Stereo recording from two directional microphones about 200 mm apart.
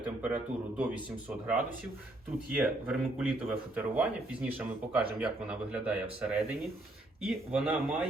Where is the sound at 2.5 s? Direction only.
5° right (ahead or behind).